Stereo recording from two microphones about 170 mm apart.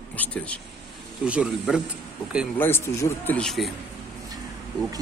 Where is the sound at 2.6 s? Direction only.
15° left (ahead or behind).